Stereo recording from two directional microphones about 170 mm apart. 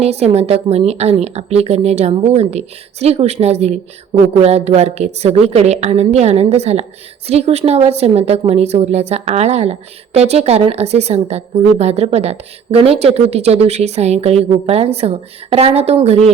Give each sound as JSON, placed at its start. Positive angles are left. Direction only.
{"t": 0.0, "sound": "a woman's voice", "side_deg": -40}